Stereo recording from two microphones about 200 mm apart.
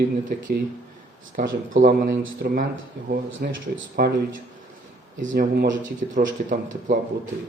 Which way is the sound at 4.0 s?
50° right (ahead or behind).